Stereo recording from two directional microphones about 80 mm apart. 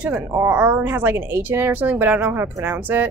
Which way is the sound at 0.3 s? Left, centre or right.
Right.